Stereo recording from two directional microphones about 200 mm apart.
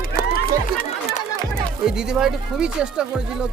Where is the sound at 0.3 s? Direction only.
45° left (ahead or behind).